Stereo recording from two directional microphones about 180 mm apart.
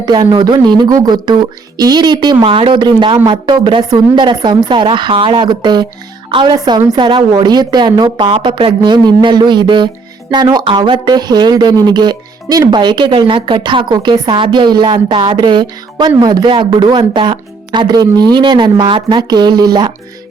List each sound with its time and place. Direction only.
0.0 s speech: 25° right (ahead or behind)